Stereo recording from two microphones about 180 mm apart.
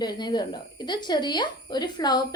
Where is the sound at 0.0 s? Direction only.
25° left (ahead or behind).